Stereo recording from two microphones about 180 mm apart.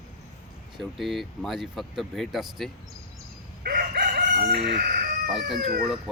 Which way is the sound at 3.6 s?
55° right (ahead or behind).